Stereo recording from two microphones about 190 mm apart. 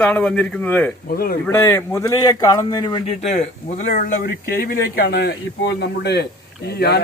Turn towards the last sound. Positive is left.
turn(degrees=60)  # may be behind; listen again after turning